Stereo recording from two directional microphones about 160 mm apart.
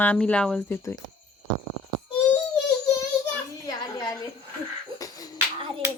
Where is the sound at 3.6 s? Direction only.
25° left (ahead or behind).